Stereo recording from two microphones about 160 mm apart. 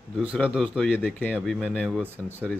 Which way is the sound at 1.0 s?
10° left (ahead or behind).